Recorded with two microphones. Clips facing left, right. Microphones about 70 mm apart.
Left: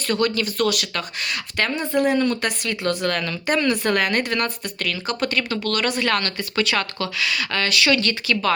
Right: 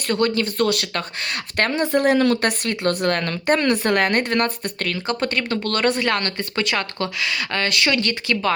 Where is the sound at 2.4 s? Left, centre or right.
Right.